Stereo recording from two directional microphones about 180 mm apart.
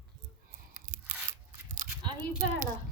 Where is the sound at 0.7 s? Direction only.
45° right (ahead or behind).